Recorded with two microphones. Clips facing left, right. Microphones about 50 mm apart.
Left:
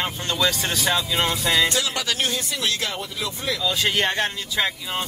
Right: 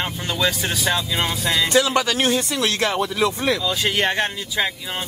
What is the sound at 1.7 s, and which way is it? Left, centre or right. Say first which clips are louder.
Speech: right 7 dB; right.